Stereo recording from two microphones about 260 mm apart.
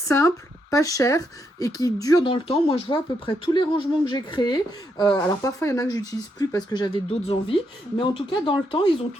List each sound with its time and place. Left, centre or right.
0.1 s speech: centre